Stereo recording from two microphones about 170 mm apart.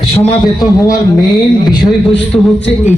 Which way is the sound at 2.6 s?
35° left (ahead or behind).